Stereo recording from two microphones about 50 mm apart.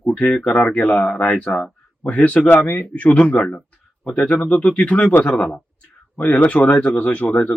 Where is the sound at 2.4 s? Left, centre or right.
Left.